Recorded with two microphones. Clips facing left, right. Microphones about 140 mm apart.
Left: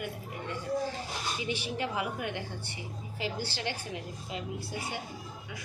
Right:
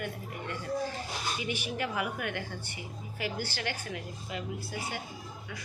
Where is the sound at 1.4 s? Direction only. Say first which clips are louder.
Left 2 dB; 25° left (ahead or behind).